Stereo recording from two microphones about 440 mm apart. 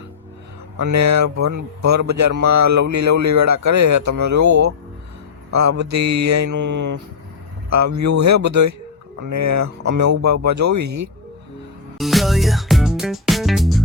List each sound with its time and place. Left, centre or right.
0.8 s speech: right
11.9 s music: centre